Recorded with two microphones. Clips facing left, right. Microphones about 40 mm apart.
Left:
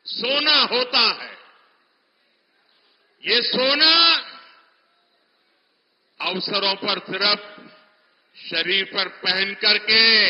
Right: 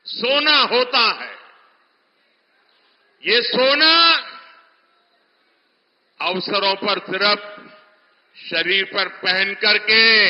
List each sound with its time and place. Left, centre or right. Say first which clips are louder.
0.0 s a man's voice: right 4 dB; centre
3.3 s a man's voice: right 4 dB; centre
6.1 s a man's voice: right 4 dB; centre